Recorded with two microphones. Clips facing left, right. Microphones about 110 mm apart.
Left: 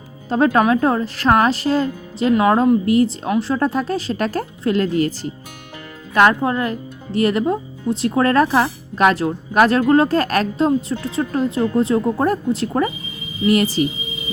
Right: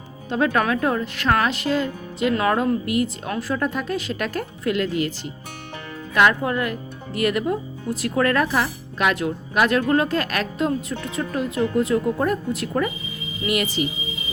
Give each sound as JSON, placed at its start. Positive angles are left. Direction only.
{"t": 0.3, "sound": "speech", "side_deg": 35}
{"t": 2.3, "sound": "a woman's voice", "side_deg": 25}
{"t": 6.5, "sound": "speech", "side_deg": 30}